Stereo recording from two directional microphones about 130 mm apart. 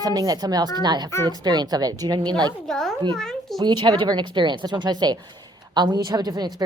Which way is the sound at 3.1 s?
5° left (ahead or behind).